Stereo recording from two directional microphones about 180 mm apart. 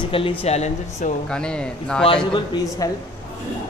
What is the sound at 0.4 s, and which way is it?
Speech, 35° left (ahead or behind).